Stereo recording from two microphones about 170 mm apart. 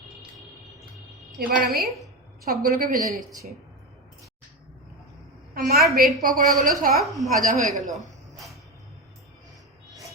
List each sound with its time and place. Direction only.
1.4 s a woman's voice: 60° right (ahead or behind)
5.5 s a woman's voice: 60° right (ahead or behind)
6.9 s a woman's voice: centre (ahead or behind)
7.4 s speech: 45° right (ahead or behind)